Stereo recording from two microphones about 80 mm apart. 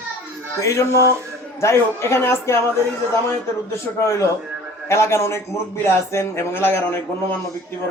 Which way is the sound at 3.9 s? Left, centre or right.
Left.